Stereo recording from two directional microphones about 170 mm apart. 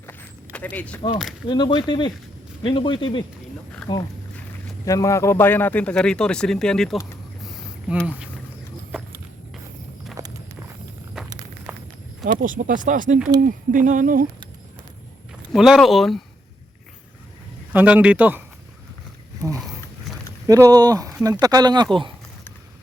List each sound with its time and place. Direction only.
0.1 s a sound: 10° left (ahead or behind)
1.5 s speech: 25° left (ahead or behind); by 7.0 s 5° left (ahead or behind)
8.0 s speech: 10° right (ahead or behind)
12.2 s speech: 50° right (ahead or behind)
15.5 s speech: centre (ahead or behind)
17.7 s speech: 10° right (ahead or behind)
20.5 s speech: 20° right (ahead or behind)